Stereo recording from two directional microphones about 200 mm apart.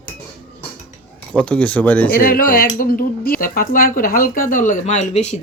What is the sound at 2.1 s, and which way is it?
Speech, 45° left (ahead or behind).